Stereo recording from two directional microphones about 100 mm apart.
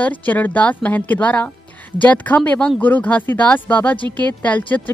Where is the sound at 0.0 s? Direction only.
15° left (ahead or behind).